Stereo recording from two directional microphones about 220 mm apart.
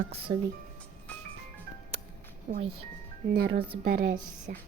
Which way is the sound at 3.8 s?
40° right (ahead or behind).